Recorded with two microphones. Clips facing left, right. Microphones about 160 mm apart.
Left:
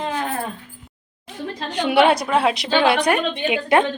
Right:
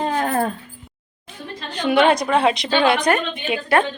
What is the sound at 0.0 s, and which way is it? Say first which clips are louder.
Dog: right 4 dB; 45° right (ahead or behind).